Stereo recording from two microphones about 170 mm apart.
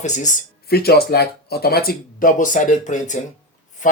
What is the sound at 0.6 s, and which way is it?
Speech, 65° left (ahead or behind).